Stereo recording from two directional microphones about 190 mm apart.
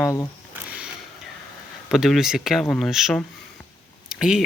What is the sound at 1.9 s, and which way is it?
Speech, centre (ahead or behind).